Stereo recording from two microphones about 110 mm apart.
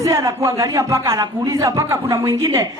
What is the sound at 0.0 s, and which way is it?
Speech, 30° right (ahead or behind).